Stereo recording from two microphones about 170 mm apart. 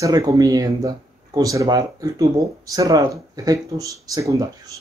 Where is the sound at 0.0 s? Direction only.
20° right (ahead or behind).